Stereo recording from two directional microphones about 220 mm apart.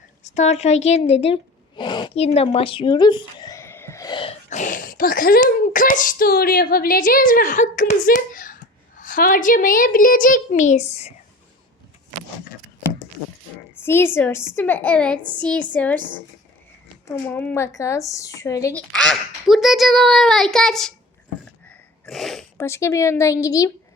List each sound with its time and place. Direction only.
0.3 s speech: 30° left (ahead or behind)
13.8 s a woman's voice: 10° left (ahead or behind)
17.2 s a woman's voice: 10° left (ahead or behind)
18.8 s a child's voice: 5° left (ahead or behind)
21.7 s sneeze: centre (ahead or behind)
22.5 s a woman's voice: 10° left (ahead or behind)